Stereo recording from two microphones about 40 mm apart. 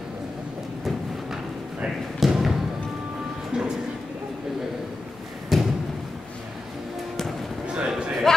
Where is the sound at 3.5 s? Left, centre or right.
Right.